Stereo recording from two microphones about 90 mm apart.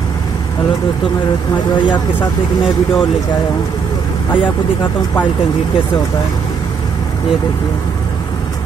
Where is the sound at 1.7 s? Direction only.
60° left (ahead or behind).